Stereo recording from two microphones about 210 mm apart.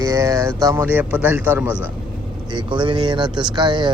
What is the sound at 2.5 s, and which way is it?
Speech, 20° right (ahead or behind).